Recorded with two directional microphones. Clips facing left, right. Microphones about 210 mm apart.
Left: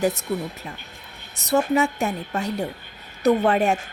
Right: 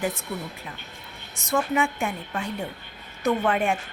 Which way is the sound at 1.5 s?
40° left (ahead or behind).